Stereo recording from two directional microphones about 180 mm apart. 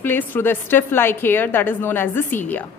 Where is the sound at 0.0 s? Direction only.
10° left (ahead or behind).